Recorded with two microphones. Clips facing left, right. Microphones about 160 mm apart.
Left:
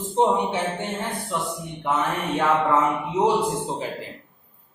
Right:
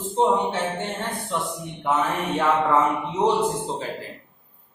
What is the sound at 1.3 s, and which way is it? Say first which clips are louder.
Speech: right 1 dB; centre (ahead or behind).